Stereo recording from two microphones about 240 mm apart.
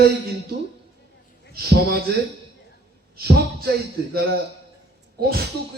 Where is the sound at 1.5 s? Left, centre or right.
Right.